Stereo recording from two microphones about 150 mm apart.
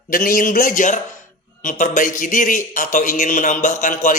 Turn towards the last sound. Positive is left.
turn(degrees=55)  # may be behind; listen again after turning